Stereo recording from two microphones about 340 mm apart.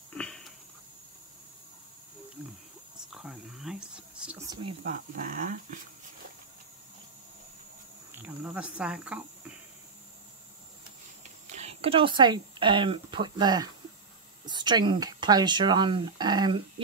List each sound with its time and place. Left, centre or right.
0.1 s a sound: centre
3.1 s speech: centre
4.8 s speech: right
8.1 s speech: centre
11.4 s speech: centre